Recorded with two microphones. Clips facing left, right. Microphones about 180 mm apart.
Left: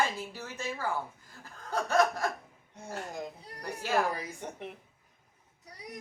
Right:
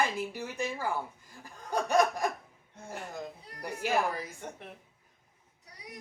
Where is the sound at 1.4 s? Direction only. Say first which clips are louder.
Right 1 dB; 15° right (ahead or behind).